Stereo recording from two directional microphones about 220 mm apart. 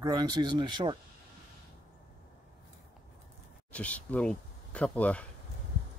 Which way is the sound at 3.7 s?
5° left (ahead or behind).